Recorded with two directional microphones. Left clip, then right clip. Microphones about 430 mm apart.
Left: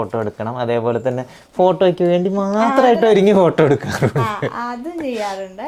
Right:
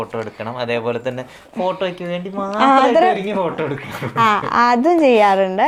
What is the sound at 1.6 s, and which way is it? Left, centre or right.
Speech, left.